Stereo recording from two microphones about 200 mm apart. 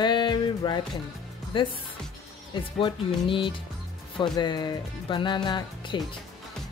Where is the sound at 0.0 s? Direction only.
20° left (ahead or behind).